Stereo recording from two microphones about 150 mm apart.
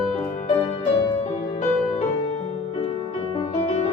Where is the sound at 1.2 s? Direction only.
45° left (ahead or behind).